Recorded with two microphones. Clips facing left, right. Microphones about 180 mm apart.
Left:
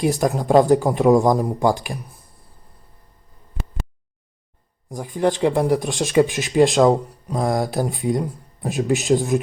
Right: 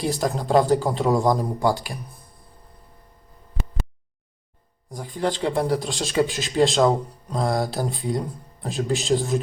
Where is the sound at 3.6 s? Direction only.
Centre (ahead or behind).